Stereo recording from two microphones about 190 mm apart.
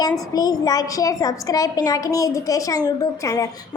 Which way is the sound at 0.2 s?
20° left (ahead or behind).